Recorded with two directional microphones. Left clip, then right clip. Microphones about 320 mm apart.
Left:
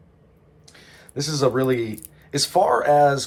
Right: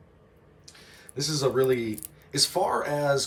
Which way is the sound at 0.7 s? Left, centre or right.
Centre.